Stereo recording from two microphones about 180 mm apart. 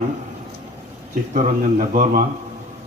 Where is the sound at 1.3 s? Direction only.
50° right (ahead or behind).